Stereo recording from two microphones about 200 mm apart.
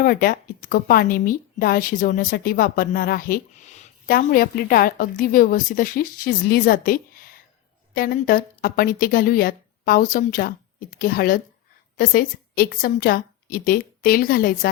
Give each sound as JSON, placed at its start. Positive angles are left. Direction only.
{"t": 0.0, "sound": "a woman's voice", "side_deg": 45}